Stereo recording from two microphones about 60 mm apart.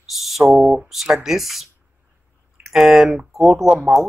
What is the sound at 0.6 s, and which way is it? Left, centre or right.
Speech, centre.